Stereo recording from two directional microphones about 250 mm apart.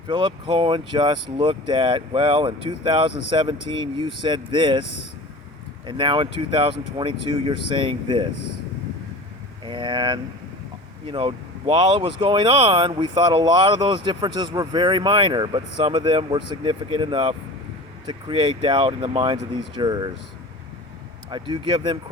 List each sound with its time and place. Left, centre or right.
0.1 s speech: centre
5.8 s speech: centre
9.6 s speech: centre
21.2 s speech: centre